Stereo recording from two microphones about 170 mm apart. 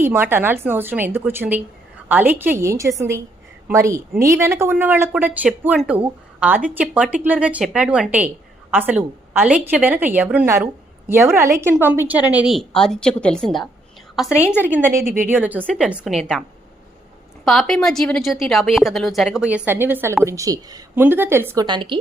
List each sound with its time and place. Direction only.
0.0 s a woman's voice: 15° right (ahead or behind)
12.5 s a woman's voice: centre (ahead or behind)
14.6 s a woman's voice: 10° right (ahead or behind)
17.4 s a woman's voice: centre (ahead or behind); by 21.9 s 25° right (ahead or behind)